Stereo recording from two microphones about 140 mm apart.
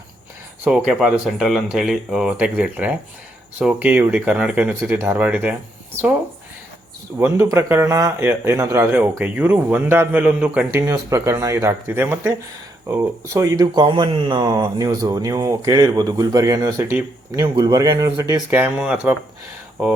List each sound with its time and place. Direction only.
0.6 s speech: 10° right (ahead or behind)
7.2 s speech: 20° right (ahead or behind)
13.8 s speech: 35° right (ahead or behind)
18.8 s speech: 5° right (ahead or behind)